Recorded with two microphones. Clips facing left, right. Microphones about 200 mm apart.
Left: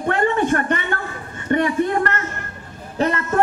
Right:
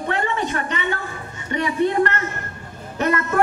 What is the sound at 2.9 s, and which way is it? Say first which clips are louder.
Speech: left 1 dB; 30° left (ahead or behind).